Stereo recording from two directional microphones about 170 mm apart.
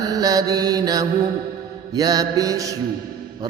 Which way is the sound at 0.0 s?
20° right (ahead or behind).